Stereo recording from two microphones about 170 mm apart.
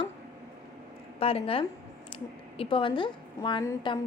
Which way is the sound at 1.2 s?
35° left (ahead or behind).